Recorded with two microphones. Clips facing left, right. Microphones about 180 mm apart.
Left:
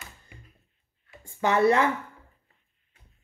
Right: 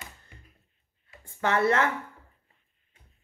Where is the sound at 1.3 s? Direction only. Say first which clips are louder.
Left 3 dB; 15° left (ahead or behind).